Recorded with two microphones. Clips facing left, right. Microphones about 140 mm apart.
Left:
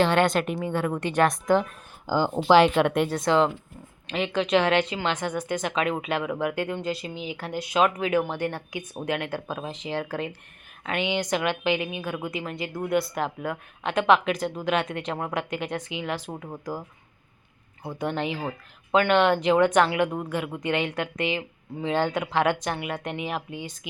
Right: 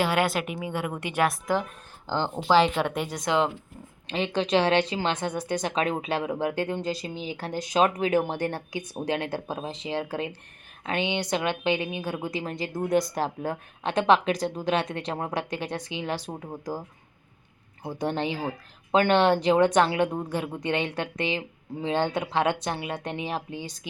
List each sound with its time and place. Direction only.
0.0 s a woman's voice: 10° right (ahead or behind)
2.0 s speech: 10° left (ahead or behind)
2.7 s a woman's voice: 5° right (ahead or behind)
3.2 s a woman's voice: 20° right (ahead or behind)
4.1 s speech: 30° right (ahead or behind)
18.0 s speech: 30° right (ahead or behind)